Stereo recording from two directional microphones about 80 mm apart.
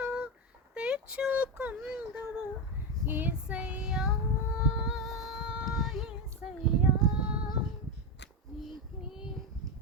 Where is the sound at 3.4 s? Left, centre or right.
Centre.